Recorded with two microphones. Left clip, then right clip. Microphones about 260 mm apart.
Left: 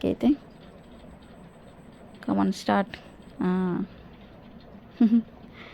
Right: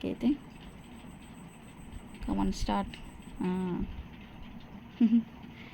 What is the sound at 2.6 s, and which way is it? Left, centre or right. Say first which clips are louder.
Speech: left 8 dB; centre.